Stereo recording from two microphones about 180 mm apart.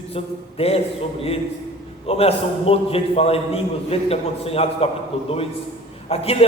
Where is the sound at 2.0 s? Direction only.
35° left (ahead or behind).